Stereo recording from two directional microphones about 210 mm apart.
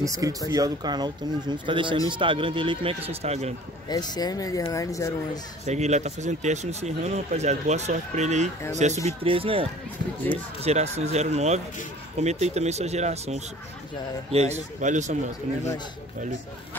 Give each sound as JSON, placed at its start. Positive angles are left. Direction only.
{"t": 0.0, "sound": "speech", "side_deg": -15}
{"t": 3.9, "sound": "speech", "side_deg": 20}
{"t": 5.7, "sound": "speech", "side_deg": -35}